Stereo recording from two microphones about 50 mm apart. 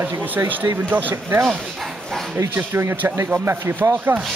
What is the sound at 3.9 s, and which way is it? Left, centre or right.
Speech, right.